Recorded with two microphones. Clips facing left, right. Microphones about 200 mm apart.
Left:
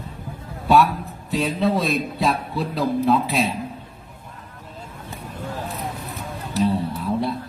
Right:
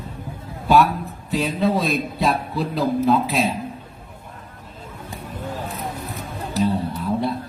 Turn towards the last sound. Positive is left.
turn(degrees=0)  # may be behind; listen again after turning